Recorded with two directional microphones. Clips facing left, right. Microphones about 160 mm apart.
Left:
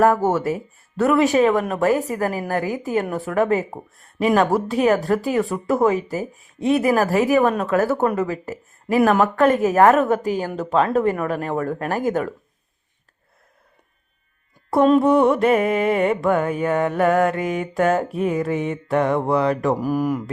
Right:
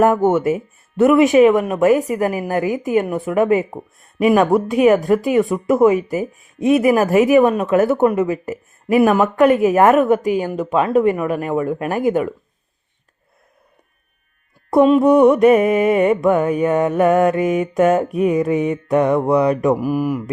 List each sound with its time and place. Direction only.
0.0 s mantra: 20° right (ahead or behind)
2.5 s a woman's voice: 20° right (ahead or behind)
3.2 s mantra: 15° right (ahead or behind)
8.1 s speech: 20° right (ahead or behind)
9.0 s speech: 5° right (ahead or behind)
9.2 s mantra: 15° right (ahead or behind)
15.0 s mantra: 15° right (ahead or behind)